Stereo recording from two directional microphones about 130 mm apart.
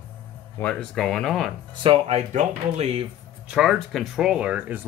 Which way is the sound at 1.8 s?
50° right (ahead or behind).